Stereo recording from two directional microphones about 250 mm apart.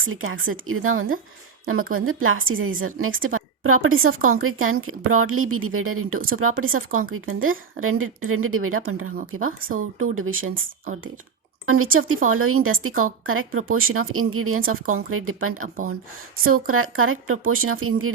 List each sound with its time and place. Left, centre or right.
0.0 s speech: right
11.6 s speech: right